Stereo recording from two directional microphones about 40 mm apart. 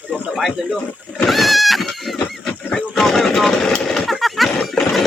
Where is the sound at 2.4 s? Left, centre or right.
Centre.